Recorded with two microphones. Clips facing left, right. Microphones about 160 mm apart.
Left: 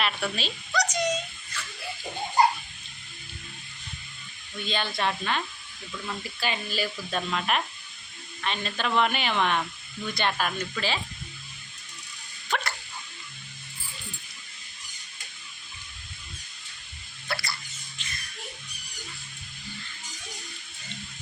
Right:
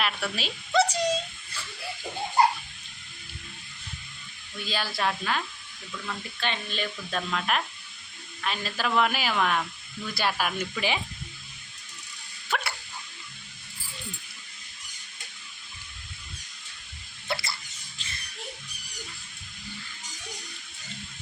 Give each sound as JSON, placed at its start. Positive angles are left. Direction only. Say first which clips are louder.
{"t": 0.0, "sound": "speech", "louder": "left 1 dB", "side_deg": -5}
{"t": 0.7, "sound": "a sound", "louder": "right 4 dB", "side_deg": -30}
{"t": 4.6, "sound": "speech", "louder": "left 1 dB", "side_deg": -5}
{"t": 12.5, "sound": "dog", "louder": "left 1 dB", "side_deg": -5}
{"t": 17.2, "sound": "drip", "louder": "right 1 dB", "side_deg": -25}
{"t": 17.9, "sound": "a sound", "louder": "left 1 dB", "side_deg": -35}